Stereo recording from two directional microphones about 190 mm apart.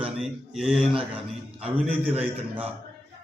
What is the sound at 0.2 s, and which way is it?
A man's voice, 5° right (ahead or behind).